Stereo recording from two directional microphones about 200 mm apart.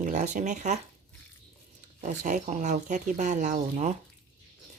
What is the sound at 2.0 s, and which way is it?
Speech, 40° right (ahead or behind).